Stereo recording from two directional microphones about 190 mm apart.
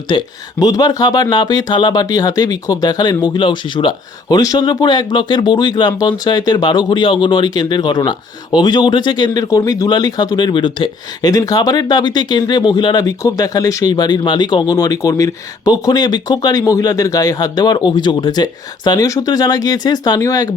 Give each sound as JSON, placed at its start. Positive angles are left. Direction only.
{"t": 0.1, "sound": "speech", "side_deg": 20}